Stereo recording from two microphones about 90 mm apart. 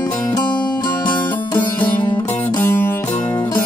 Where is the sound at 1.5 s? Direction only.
60° left (ahead or behind).